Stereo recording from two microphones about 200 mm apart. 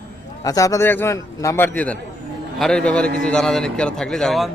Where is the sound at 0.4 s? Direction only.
15° left (ahead or behind).